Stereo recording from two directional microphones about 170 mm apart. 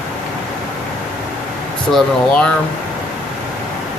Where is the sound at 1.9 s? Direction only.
5° left (ahead or behind).